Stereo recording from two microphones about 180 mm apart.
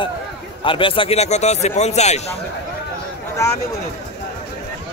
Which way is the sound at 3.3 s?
15° left (ahead or behind).